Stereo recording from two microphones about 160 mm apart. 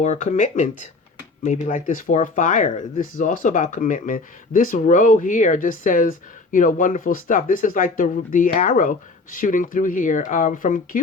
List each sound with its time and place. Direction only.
0.0 s speech: 45° left (ahead or behind)